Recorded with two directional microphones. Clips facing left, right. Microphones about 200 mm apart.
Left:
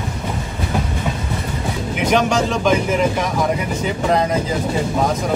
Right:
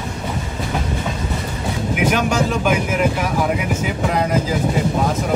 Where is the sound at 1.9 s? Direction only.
5° right (ahead or behind).